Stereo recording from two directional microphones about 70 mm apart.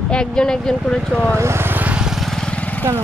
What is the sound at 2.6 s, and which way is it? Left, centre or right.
Vehicle, centre.